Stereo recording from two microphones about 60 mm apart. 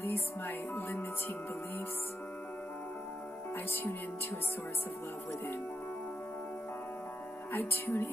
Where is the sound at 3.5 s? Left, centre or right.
Left.